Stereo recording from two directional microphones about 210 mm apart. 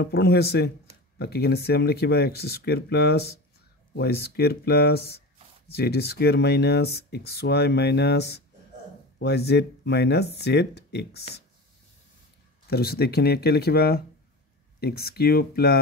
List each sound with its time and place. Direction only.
0.0 s speech: 50° left (ahead or behind)
12.6 s speech: 50° left (ahead or behind)